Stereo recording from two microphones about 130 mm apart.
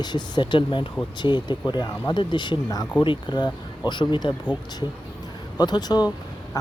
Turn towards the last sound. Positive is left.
turn(degrees=30)  # may be behind; listen again after turning